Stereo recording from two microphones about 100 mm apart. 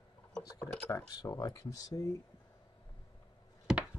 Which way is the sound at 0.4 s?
40° left (ahead or behind).